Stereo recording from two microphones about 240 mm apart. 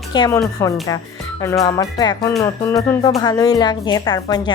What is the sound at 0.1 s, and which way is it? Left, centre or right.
Speech, centre.